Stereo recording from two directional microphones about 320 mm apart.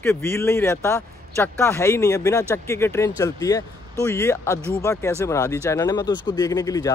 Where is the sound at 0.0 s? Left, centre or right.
Centre.